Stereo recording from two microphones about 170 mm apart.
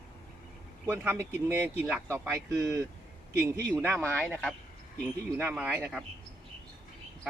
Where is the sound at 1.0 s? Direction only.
15° right (ahead or behind).